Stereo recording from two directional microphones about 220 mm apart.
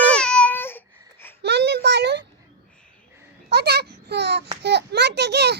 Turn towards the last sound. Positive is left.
turn(degrees=-50)  # may be behind; listen again after turning